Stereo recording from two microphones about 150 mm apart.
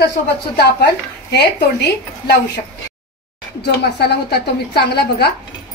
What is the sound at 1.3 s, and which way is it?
A woman's voice, 90° left.